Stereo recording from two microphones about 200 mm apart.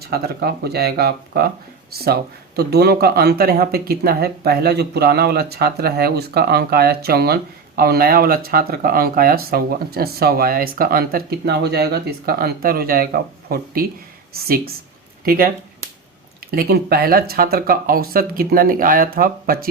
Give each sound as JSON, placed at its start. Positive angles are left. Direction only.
{"t": 0.1, "sound": "speech", "side_deg": -55}
{"t": 2.6, "sound": "speech", "side_deg": -55}
{"t": 16.5, "sound": "speech", "side_deg": -50}